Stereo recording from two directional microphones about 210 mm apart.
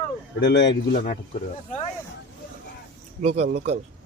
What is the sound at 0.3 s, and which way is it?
Speech, 55° left (ahead or behind).